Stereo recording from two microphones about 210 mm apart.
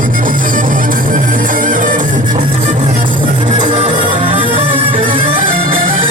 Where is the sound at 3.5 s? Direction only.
25° right (ahead or behind).